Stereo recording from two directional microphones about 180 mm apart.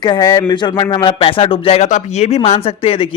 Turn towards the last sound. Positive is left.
turn(degrees=30)  # may be behind; listen again after turning